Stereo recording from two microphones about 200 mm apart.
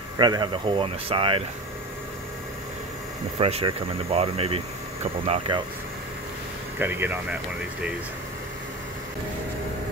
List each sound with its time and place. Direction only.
0.2 s speech: 20° right (ahead or behind)
3.3 s speech: 30° right (ahead or behind)
6.8 s speech: 10° right (ahead or behind)